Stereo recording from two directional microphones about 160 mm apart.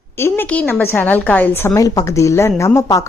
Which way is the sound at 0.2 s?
15° left (ahead or behind).